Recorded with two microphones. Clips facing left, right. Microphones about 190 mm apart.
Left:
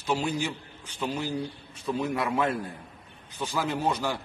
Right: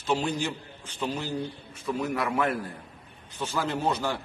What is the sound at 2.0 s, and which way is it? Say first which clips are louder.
A man's voice: even; 25° left (ahead or behind).